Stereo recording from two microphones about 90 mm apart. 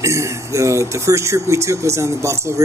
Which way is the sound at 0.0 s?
35° right (ahead or behind).